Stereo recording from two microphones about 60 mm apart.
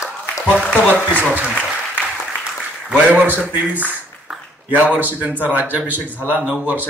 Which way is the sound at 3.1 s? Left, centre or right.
Right.